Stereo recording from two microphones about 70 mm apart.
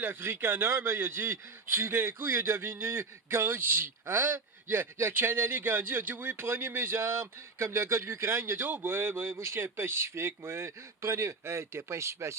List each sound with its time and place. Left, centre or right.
0.0 s a man's voice: right
6.4 s a man's voice: right